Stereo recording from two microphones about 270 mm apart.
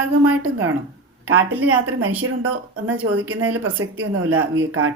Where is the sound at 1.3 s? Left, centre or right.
Right.